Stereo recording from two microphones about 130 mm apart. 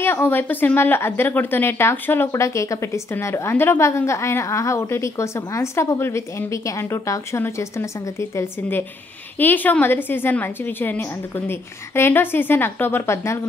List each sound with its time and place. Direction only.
0.0 s a woman's voice: 15° left (ahead or behind)